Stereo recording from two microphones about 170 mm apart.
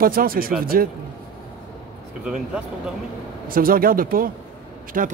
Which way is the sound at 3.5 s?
60° right (ahead or behind).